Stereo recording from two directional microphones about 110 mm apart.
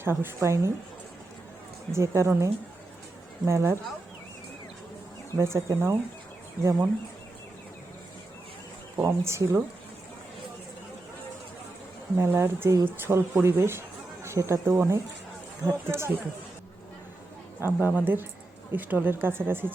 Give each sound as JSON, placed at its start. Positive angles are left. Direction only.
{"t": 0.0, "sound": "speech", "side_deg": -20}
{"t": 1.9, "sound": "speech", "side_deg": -25}
{"t": 5.4, "sound": "speech", "side_deg": -25}
{"t": 9.0, "sound": "speech", "side_deg": -25}
{"t": 12.1, "sound": "speech", "side_deg": -25}
{"t": 17.6, "sound": "speech", "side_deg": -15}